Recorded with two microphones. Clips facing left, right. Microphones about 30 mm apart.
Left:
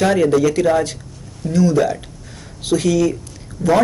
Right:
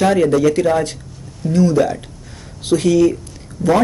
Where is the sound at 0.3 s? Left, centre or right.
Right.